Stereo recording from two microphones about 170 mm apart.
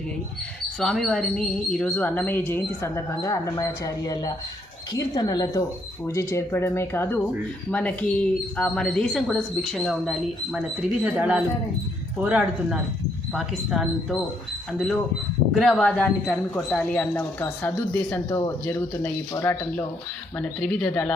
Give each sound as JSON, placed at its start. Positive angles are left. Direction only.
{"t": 0.8, "sound": "speech", "side_deg": 0}